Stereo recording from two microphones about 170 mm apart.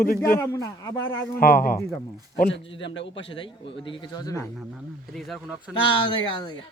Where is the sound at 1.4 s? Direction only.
60° left (ahead or behind).